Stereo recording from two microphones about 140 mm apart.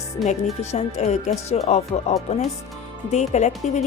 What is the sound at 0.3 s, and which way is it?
Speech, 50° left (ahead or behind).